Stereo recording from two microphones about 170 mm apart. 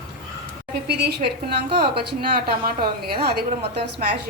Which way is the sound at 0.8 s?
70° right (ahead or behind).